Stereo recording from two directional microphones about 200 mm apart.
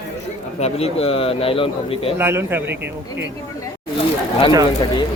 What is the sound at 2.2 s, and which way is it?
Speech, 10° right (ahead or behind).